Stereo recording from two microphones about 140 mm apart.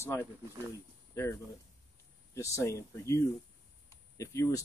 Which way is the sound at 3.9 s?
20° left (ahead or behind).